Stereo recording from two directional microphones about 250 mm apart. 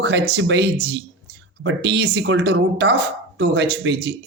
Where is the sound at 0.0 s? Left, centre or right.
Right.